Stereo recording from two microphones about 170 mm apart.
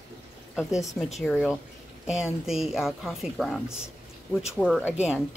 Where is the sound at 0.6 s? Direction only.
5° right (ahead or behind).